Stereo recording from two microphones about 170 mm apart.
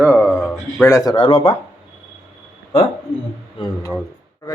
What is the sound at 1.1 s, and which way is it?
Speech, 30° left (ahead or behind).